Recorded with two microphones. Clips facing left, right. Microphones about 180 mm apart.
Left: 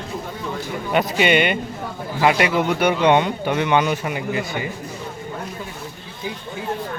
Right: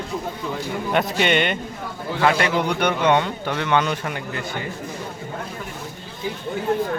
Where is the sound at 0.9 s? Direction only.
Centre (ahead or behind).